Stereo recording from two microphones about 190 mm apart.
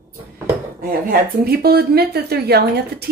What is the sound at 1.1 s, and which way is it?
Speech, 55° right (ahead or behind).